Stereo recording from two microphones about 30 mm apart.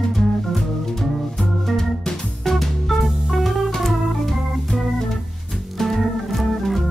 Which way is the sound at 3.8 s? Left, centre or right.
Centre.